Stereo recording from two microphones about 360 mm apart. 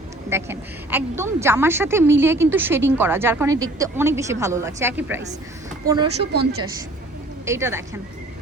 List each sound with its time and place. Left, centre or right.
0.3 s a woman's voice: centre
6.3 s a woman's voice: right
7.4 s a woman's voice: centre